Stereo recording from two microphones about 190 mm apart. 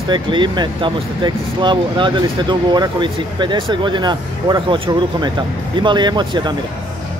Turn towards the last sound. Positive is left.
turn(degrees=-25)  # may be behind; listen again after turning